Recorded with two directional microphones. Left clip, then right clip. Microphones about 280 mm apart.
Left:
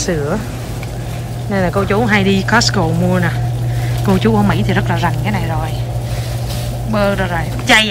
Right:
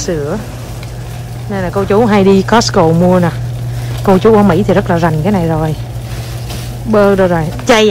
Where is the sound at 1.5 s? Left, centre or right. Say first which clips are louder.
Right 2 dB; centre.